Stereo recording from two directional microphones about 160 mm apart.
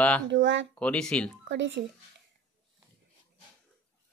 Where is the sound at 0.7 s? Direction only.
5° left (ahead or behind).